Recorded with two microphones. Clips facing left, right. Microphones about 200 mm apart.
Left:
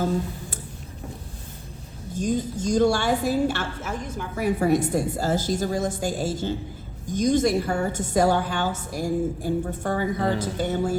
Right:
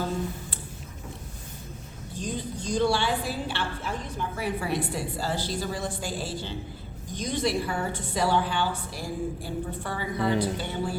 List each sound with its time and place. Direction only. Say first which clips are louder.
2.1 s a woman's voice: left 8 dB; 45° left (ahead or behind)